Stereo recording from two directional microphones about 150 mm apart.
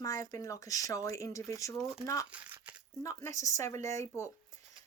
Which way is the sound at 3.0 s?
20° left (ahead or behind).